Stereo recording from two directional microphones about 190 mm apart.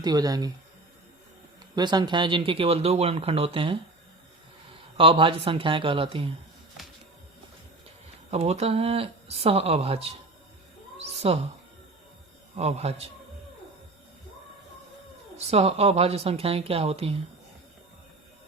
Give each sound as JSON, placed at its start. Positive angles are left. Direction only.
{"t": 0.0, "sound": "speech", "side_deg": -20}
{"t": 1.7, "sound": "speech", "side_deg": -20}
{"t": 4.9, "sound": "speech", "side_deg": -30}
{"t": 8.3, "sound": "a woman's voice", "side_deg": -35}
{"t": 11.0, "sound": "a sound", "side_deg": -35}
{"t": 12.5, "sound": "a woman's voice", "side_deg": -35}
{"t": 15.4, "sound": "a woman's voice", "side_deg": -30}